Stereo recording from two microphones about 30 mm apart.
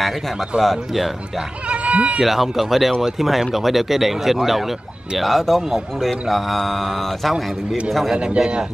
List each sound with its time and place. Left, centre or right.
0.6 s mantra: centre
1.7 s speech: right
2.2 s mantra: centre
3.0 s speech: centre
5.2 s mantra: centre